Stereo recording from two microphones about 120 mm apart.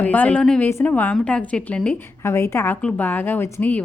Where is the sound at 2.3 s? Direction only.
20° left (ahead or behind).